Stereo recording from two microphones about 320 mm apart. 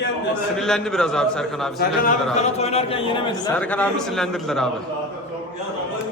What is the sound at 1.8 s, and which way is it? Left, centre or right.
A man's voice, left.